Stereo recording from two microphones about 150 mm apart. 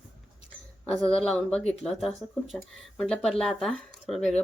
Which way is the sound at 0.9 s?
5° left (ahead or behind).